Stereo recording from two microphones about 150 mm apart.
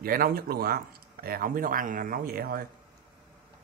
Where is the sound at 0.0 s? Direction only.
75° right (ahead or behind).